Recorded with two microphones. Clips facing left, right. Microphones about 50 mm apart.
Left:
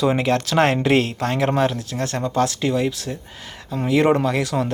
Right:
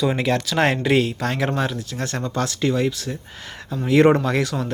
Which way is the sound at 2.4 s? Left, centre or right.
Centre.